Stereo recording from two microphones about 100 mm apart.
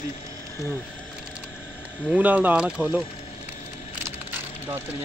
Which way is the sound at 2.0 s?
15° right (ahead or behind).